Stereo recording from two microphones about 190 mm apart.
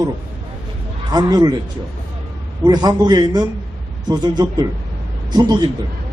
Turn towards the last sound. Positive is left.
turn(degrees=-20)  # may be behind; listen again after turning